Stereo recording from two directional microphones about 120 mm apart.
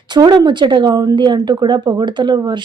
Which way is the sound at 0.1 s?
40° right (ahead or behind).